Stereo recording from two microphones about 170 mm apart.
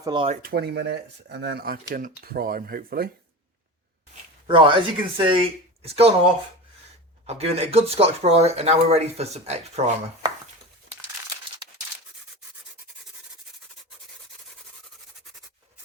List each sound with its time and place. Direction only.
0.0 s speech: 25° right (ahead or behind)
0.4 s speech: 70° right (ahead or behind)
4.4 s speech: 30° right (ahead or behind)
7.3 s speech: 35° right (ahead or behind)